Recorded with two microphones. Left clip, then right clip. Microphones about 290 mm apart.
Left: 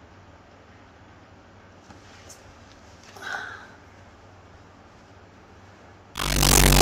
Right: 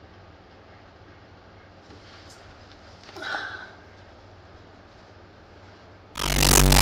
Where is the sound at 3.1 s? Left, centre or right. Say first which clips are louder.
Right 2 dB; right.